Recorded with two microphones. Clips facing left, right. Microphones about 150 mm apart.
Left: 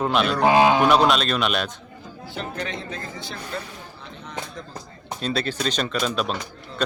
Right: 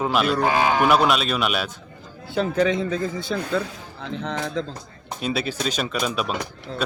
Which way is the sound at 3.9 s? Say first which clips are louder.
Right 8 dB; 90° right.